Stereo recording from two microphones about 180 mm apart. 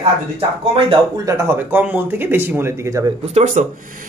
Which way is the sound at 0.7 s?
30° right (ahead or behind).